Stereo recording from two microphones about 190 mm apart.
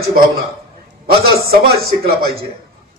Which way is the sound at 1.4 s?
55° right (ahead or behind).